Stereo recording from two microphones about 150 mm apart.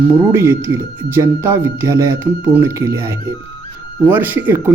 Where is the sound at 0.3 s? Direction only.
20° right (ahead or behind).